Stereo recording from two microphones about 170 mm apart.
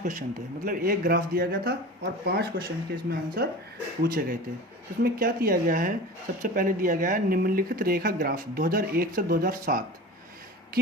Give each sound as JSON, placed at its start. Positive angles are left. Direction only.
{"t": 0.0, "sound": "speech", "side_deg": -50}